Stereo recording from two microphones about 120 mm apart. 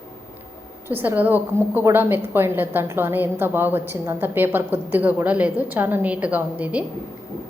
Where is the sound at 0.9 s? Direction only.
15° right (ahead or behind).